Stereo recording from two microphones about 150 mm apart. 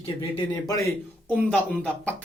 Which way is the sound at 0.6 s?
25° left (ahead or behind).